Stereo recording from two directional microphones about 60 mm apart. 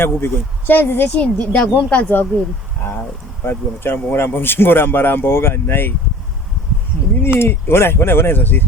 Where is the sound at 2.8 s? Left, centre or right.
Left.